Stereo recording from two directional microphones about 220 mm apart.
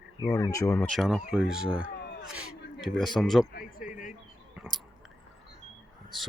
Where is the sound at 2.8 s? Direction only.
Centre (ahead or behind).